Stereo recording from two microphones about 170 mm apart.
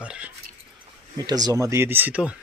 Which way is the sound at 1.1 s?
25° right (ahead or behind).